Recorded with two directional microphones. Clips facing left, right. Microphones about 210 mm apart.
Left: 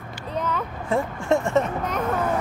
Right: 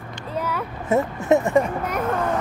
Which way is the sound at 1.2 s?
20° right (ahead or behind).